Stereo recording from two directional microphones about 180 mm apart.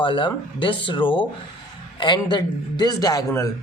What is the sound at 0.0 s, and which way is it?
Speech, 30° left (ahead or behind).